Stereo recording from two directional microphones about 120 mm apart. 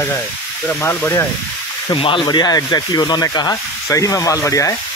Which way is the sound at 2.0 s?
45° left (ahead or behind).